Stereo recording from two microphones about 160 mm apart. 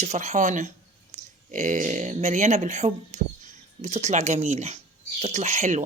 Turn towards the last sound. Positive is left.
turn(degrees=-45)  # may be behind; listen again after turning